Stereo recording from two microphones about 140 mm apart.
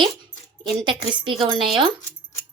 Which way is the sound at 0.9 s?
35° right (ahead or behind).